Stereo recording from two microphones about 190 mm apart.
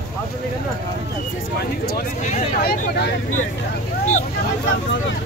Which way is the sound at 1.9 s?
55° left (ahead or behind).